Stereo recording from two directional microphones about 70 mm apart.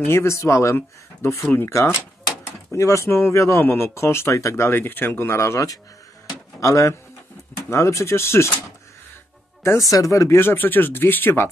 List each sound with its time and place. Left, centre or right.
0.0 s speech: left
2.7 s speech: left
9.6 s speech: left